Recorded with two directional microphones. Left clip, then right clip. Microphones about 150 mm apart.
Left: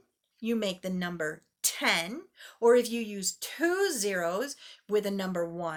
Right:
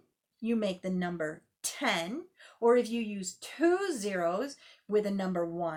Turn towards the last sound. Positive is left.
turn(degrees=20)  # may be behind; listen again after turning